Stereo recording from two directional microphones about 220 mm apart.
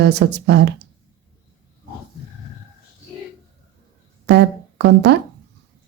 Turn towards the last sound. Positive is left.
turn(degrees=-50)  # may be behind; listen again after turning